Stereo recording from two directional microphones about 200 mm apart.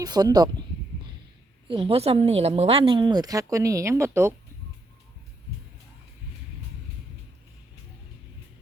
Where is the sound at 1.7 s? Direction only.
30° right (ahead or behind).